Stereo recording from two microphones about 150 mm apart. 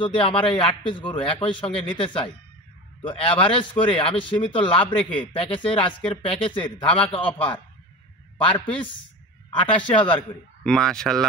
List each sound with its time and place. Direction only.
0.0 s a man's voice: 35° left (ahead or behind)
8.5 s a man's voice: 35° left (ahead or behind)
9.9 s a man's voice: 35° left (ahead or behind)
10.6 s speech: 5° left (ahead or behind)